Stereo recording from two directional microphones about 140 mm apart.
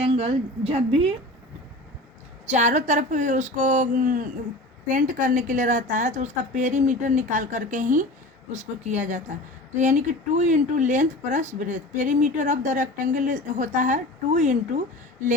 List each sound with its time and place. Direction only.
0.0 s a woman's voice: 45° right (ahead or behind)
2.5 s a woman's voice: 60° right (ahead or behind)